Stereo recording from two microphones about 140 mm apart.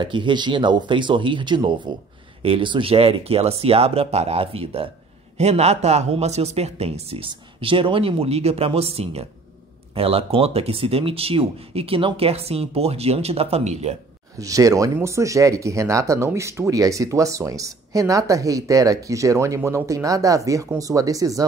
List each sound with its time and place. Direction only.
0.0 s speech: 35° right (ahead or behind)
14.4 s speech: 25° right (ahead or behind)